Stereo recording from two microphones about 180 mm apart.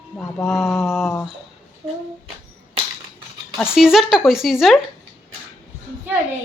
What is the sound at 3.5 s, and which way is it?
A woman's voice, 5° right (ahead or behind).